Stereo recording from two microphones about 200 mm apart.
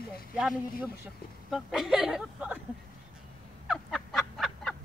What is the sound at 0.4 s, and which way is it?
Speech, 5° right (ahead or behind).